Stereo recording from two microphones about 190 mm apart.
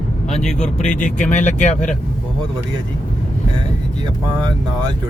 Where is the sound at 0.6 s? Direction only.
40° left (ahead or behind).